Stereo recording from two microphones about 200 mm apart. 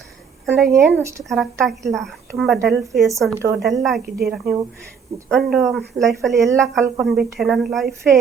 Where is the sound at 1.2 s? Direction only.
Centre (ahead or behind).